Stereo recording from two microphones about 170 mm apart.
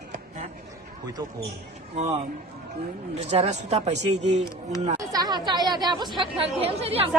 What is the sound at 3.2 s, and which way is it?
Speech, 40° right (ahead or behind).